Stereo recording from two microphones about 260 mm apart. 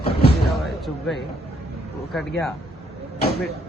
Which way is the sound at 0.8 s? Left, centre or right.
Centre.